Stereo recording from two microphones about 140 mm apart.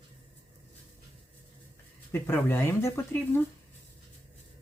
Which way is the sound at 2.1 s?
15° left (ahead or behind).